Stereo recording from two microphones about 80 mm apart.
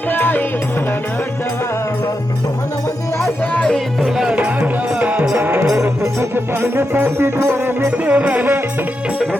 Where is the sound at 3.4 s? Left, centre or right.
Centre.